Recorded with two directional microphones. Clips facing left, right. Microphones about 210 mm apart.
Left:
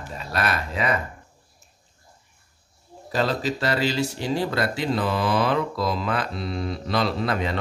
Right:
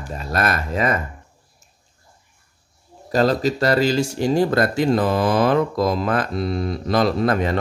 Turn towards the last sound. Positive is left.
turn(degrees=-45)  # may be behind; listen again after turning